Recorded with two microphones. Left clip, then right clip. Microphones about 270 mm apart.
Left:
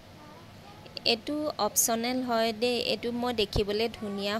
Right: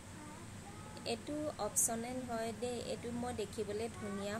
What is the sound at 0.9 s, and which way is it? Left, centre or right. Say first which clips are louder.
A woman's voice: left 13 dB; left.